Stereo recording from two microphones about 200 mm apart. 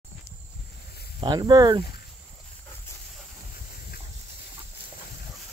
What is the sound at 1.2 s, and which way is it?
Speech, 20° right (ahead or behind).